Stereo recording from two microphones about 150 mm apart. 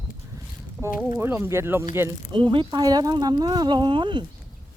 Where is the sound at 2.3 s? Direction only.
30° right (ahead or behind).